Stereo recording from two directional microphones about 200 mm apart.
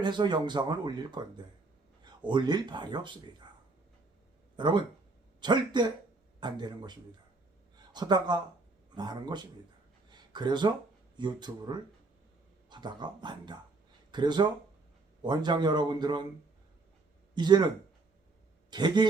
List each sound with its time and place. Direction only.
0.0 s speech: 20° right (ahead or behind)
2.2 s speech: 25° right (ahead or behind)
4.5 s speech: 25° right (ahead or behind)
7.9 s speech: 20° right (ahead or behind)
10.1 s a sound: 20° right (ahead or behind)
11.2 s speech: 20° right (ahead or behind)
17.3 s speech: 20° right (ahead or behind)
18.7 s speech: 20° right (ahead or behind)